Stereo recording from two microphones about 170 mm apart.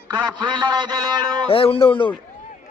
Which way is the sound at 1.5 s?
35° left (ahead or behind).